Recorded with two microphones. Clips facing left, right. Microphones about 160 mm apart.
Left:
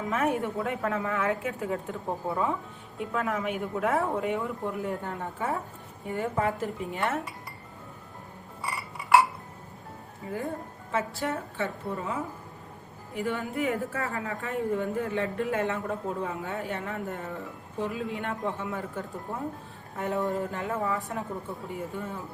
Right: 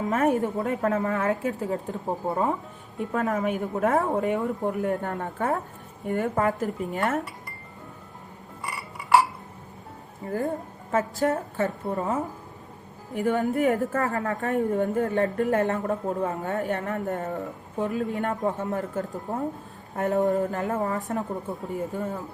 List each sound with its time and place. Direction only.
0.1 s a woman's voice: 40° right (ahead or behind)
10.9 s a woman's voice: 45° right (ahead or behind)
13.1 s a woman's voice: 40° right (ahead or behind)